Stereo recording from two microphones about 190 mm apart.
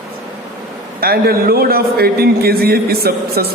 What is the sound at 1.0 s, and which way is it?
A man's voice, 55° right (ahead or behind).